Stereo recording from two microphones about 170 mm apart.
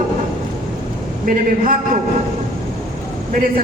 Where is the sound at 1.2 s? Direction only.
55° right (ahead or behind).